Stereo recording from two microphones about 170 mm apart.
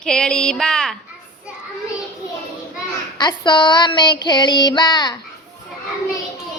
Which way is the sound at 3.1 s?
25° left (ahead or behind).